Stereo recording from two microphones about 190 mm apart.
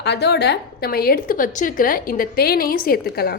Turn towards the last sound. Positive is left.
turn(degrees=55)  # may be behind; listen again after turning